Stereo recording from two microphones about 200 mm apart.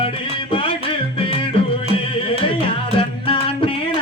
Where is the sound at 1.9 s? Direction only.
25° left (ahead or behind).